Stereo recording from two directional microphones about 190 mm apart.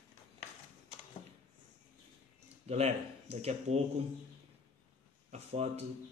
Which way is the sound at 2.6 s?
35° right (ahead or behind).